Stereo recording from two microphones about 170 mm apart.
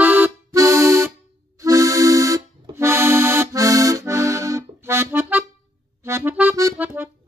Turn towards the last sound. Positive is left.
turn(degrees=-15)  # may be behind; listen again after turning